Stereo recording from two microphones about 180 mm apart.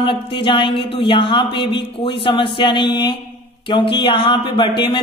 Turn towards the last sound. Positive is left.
turn(degrees=25)  # may be behind; listen again after turning